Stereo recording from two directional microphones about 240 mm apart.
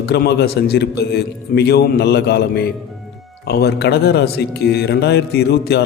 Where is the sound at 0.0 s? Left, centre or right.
Left.